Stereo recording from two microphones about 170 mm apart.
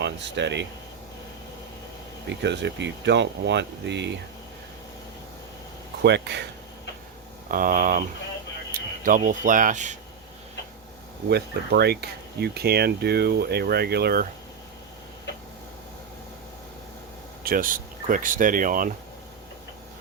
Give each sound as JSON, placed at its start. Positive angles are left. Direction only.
{"t": 0.0, "sound": "speech", "side_deg": -90}
{"t": 2.4, "sound": "speech", "side_deg": -90}
{"t": 6.0, "sound": "speech", "side_deg": -85}
{"t": 7.4, "sound": "speech", "side_deg": -55}
{"t": 9.0, "sound": "speech", "side_deg": -50}
{"t": 11.3, "sound": "speech", "side_deg": -75}
{"t": 17.4, "sound": "speech", "side_deg": -55}